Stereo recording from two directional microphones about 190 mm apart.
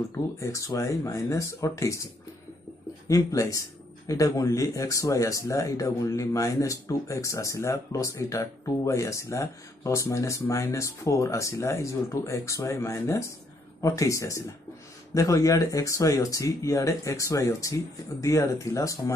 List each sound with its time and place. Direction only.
0.4 s speech: 15° left (ahead or behind)
3.1 s speech: 20° left (ahead or behind)